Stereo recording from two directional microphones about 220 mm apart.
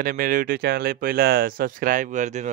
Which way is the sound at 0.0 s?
40° right (ahead or behind).